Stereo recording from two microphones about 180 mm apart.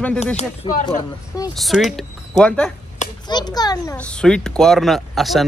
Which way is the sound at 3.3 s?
20° left (ahead or behind).